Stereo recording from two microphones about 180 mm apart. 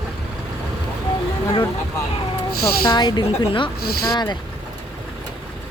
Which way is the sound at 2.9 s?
25° left (ahead or behind).